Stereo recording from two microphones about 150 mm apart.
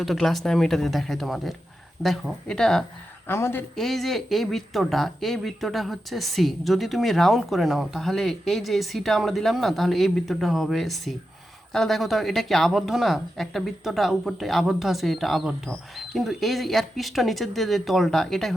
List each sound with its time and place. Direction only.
0.0 s speech: centre (ahead or behind)
3.2 s a woman's voice: 15° left (ahead or behind)
3.8 s speech: centre (ahead or behind)